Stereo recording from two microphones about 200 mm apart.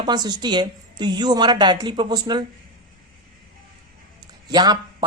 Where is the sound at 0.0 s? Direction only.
20° right (ahead or behind).